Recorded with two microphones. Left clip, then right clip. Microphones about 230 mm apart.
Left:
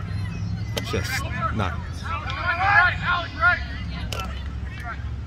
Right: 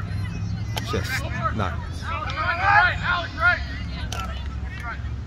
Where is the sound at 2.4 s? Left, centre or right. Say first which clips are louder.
Even; centre.